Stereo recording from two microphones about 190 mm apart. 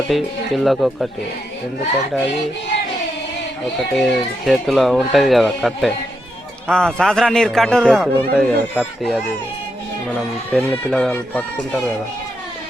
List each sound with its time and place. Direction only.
0.1 s a man's voice: centre (ahead or behind)
3.9 s a man's voice: centre (ahead or behind)